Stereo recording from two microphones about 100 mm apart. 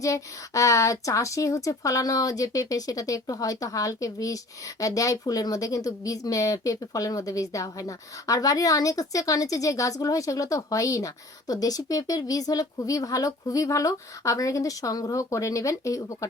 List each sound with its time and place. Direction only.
0.0 s a woman's voice: 30° left (ahead or behind)